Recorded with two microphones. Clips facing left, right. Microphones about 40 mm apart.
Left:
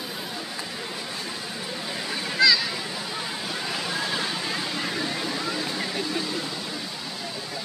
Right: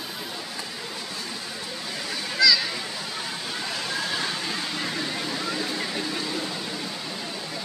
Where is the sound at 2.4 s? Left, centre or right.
Left.